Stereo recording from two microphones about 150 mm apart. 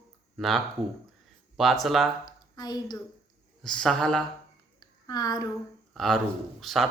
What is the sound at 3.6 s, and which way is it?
Speech, 5° left (ahead or behind).